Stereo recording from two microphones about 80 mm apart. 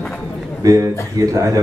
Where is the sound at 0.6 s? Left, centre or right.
Right.